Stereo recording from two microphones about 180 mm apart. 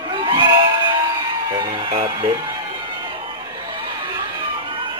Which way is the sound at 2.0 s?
20° right (ahead or behind).